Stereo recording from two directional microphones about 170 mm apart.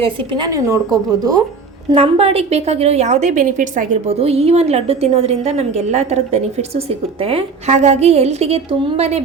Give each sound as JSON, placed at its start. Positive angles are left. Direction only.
{"t": 0.0, "sound": "a woman's voice", "side_deg": -30}
{"t": 1.9, "sound": "a woman's voice", "side_deg": -35}